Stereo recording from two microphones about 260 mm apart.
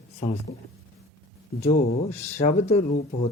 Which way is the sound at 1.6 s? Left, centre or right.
Left.